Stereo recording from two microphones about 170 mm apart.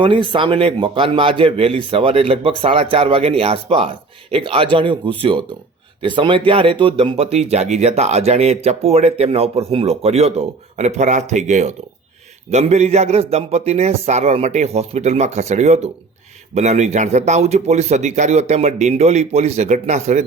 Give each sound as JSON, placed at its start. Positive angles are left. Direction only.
{"t": 0.0, "sound": "speech", "side_deg": -30}